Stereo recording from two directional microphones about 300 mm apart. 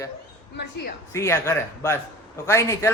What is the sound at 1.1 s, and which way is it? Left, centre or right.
Speech, centre.